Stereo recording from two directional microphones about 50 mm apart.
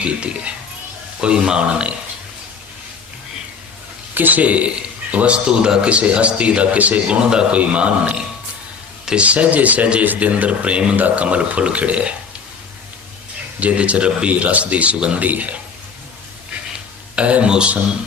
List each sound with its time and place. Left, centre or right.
0.0 s speech: right
4.1 s speech: right
9.2 s speech: right
13.6 s a man's voice: right
17.2 s speech: right